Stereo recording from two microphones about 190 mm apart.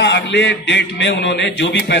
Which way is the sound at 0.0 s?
65° left (ahead or behind).